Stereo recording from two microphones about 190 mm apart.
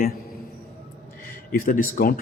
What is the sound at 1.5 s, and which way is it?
Speech, 45° left (ahead or behind).